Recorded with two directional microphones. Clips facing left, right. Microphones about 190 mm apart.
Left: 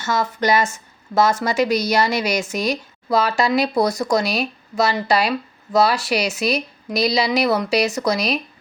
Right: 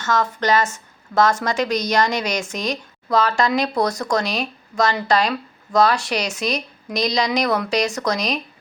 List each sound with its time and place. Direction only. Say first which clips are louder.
0.0 s speech: even; 10° left (ahead or behind)